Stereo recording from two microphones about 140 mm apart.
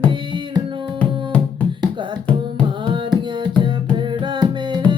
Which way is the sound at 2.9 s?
35° right (ahead or behind).